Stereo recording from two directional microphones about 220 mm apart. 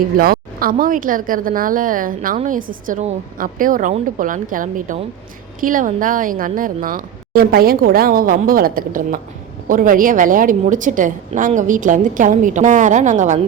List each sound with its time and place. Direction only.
0.2 s a woman's voice: 40° right (ahead or behind)